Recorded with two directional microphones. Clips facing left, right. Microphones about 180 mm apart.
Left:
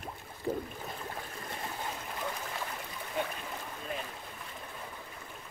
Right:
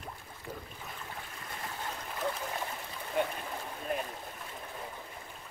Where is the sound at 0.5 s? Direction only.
50° left (ahead or behind).